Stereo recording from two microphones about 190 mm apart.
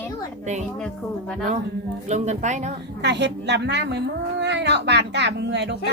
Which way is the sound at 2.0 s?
35° right (ahead or behind).